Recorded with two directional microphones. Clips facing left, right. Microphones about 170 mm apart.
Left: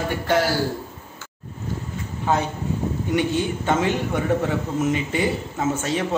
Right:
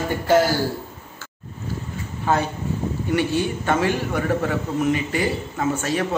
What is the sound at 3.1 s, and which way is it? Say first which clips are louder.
A man's voice: right 1 dB; 20° left (ahead or behind).